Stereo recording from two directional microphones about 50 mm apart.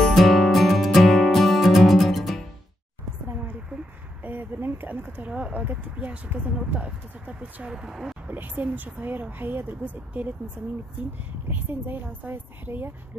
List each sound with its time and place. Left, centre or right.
0.1 s music: centre
4.2 s speech: right
7.7 s speech: centre
8.3 s a woman's voice: right